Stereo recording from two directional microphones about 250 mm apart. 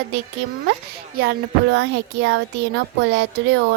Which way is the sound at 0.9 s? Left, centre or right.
Right.